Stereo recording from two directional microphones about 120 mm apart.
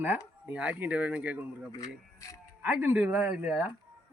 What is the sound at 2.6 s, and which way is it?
Speech, 15° right (ahead or behind).